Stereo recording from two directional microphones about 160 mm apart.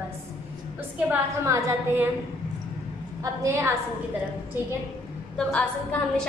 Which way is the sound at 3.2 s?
20° right (ahead or behind).